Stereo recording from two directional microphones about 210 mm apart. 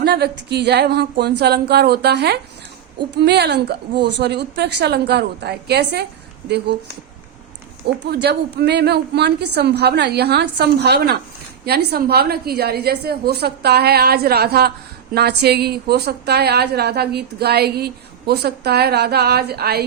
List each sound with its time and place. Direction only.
0.0 s a woman's voice: 50° right (ahead or behind)
8.1 s a woman's voice: 50° right (ahead or behind)